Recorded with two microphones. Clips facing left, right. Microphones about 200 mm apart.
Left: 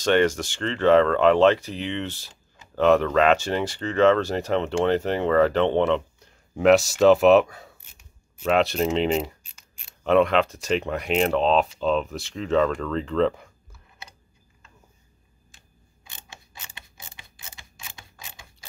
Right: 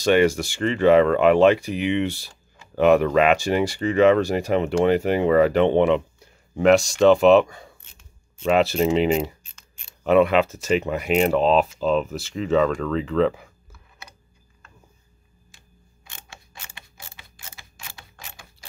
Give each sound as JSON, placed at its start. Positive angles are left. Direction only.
{"t": 0.0, "sound": "speech", "side_deg": -10}
{"t": 6.5, "sound": "speech", "side_deg": 0}
{"t": 16.1, "sound": "camera", "side_deg": 20}